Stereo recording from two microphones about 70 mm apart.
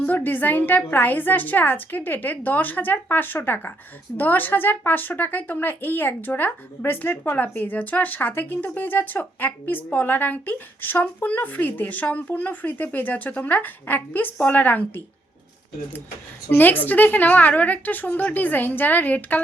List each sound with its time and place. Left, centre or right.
0.0 s speech: left
16.6 s speech: left